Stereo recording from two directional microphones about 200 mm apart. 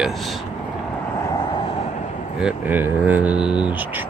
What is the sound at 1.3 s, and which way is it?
Vehicle, 20° left (ahead or behind).